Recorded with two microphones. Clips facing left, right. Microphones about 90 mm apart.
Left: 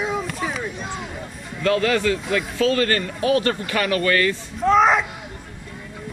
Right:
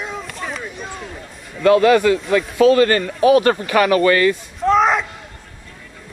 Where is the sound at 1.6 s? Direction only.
20° right (ahead or behind).